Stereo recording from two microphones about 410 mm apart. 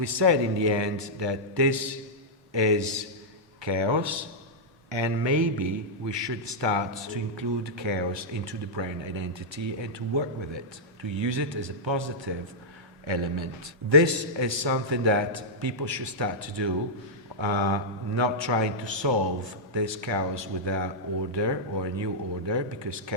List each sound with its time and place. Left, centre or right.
0.0 s a man's voice: right
13.9 s a man's voice: right